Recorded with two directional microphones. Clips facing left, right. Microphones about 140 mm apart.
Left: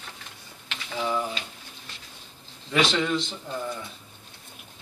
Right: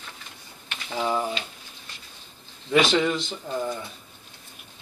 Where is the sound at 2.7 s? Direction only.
10° right (ahead or behind).